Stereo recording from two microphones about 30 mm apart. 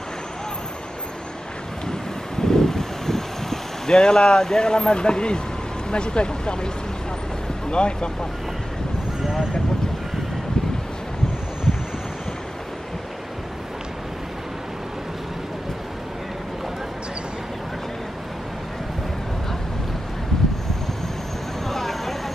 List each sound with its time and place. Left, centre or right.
1.9 s vehicle: centre
3.9 s speech: left
7.7 s speech: left
21.6 s a sound: centre